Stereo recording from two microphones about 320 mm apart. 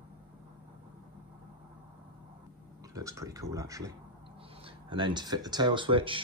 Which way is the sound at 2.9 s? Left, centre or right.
Centre.